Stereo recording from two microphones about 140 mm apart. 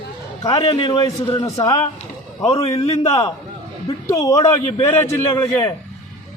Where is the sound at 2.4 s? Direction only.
45° left (ahead or behind).